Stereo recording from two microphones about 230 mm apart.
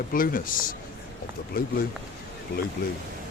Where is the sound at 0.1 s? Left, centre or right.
Left.